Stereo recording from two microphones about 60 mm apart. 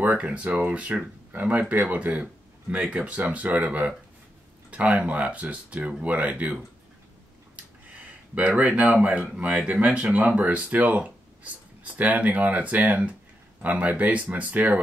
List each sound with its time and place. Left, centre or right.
0.0 s speech: right
8.4 s speech: right